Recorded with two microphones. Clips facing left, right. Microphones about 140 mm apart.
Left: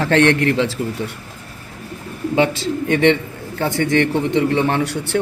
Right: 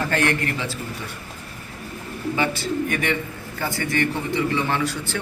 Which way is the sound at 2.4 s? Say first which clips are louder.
Left 8 dB; 90° left.